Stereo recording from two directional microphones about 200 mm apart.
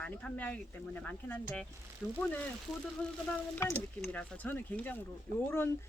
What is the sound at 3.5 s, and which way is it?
Speech, 15° left (ahead or behind).